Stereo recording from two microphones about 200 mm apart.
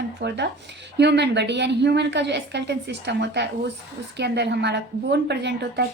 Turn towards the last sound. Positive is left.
turn(degrees=-60)  # may be behind; listen again after turning